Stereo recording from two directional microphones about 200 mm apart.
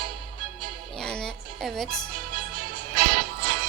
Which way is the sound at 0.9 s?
5° left (ahead or behind).